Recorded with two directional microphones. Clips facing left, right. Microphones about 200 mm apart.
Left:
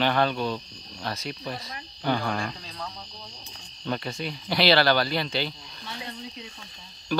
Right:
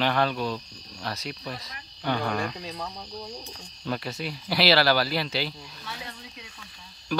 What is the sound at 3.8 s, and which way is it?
Speech, 5° right (ahead or behind).